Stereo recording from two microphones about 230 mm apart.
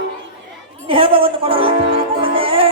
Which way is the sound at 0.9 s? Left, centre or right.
Right.